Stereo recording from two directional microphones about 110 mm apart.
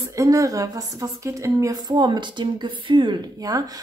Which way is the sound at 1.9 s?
45° right (ahead or behind).